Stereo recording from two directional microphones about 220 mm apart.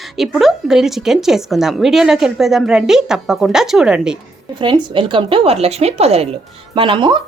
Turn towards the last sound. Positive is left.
turn(degrees=-20)  # may be behind; listen again after turning